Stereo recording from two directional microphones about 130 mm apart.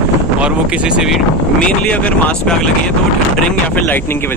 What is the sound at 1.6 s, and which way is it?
Speech, 10° left (ahead or behind).